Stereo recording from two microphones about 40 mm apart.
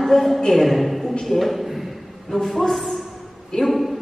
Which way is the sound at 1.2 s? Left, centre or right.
Centre.